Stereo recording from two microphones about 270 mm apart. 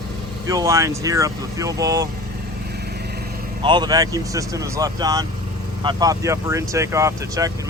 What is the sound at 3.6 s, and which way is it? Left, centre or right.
Speech, centre.